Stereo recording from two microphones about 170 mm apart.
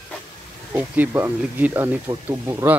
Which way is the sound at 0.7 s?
10° right (ahead or behind).